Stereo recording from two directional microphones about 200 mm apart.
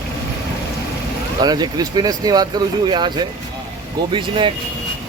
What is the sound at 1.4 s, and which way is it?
Speech, 20° right (ahead or behind).